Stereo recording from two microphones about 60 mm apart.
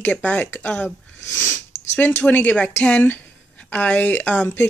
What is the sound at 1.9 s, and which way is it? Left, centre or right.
Speech, left.